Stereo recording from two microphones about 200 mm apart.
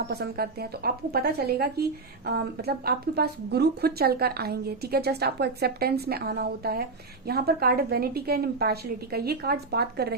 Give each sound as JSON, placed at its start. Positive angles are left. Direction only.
{"t": 0.1, "sound": "speech", "side_deg": -50}